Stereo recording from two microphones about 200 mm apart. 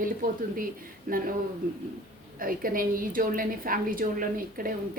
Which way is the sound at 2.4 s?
45° right (ahead or behind).